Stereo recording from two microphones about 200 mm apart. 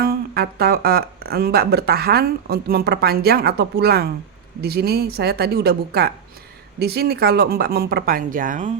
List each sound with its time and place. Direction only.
0.0 s speech: 50° right (ahead or behind)